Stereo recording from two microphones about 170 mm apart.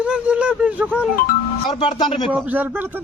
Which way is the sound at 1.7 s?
30° left (ahead or behind).